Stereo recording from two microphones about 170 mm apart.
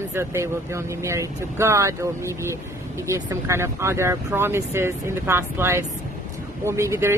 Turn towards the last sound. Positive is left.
turn(degrees=-15)  # may be behind; listen again after turning